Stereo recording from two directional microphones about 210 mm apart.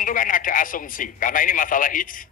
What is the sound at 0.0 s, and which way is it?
A man's voice, 40° left (ahead or behind).